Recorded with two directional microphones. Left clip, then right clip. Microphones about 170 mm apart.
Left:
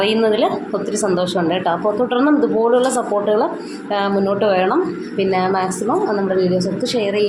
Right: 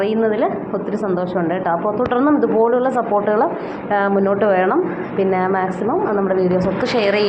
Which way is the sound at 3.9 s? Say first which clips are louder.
Right 1 dB; 10° left (ahead or behind).